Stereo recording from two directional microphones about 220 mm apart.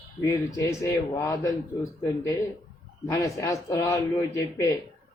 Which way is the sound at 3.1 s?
15° left (ahead or behind).